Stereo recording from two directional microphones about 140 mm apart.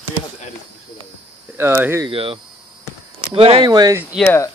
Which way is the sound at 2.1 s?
40° right (ahead or behind).